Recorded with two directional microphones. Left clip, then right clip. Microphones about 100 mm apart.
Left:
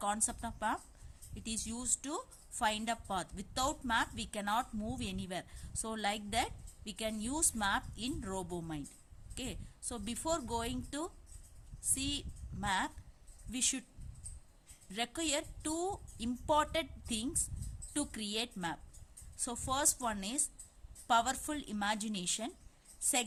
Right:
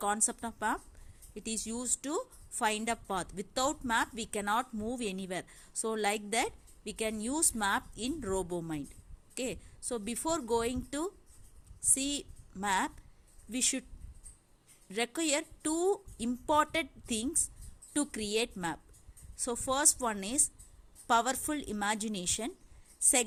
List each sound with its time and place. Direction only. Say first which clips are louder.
0.0 s a woman's voice: right 4 dB; 45° right (ahead or behind)
14.8 s a woman's voice: right 5 dB; 45° right (ahead or behind)